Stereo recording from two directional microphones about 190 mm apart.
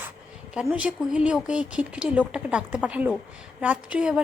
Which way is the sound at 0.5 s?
5° right (ahead or behind).